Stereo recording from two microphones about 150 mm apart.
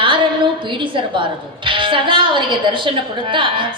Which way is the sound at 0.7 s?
35° right (ahead or behind).